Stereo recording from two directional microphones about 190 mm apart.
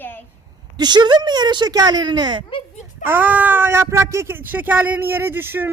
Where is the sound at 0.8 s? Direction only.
20° right (ahead or behind).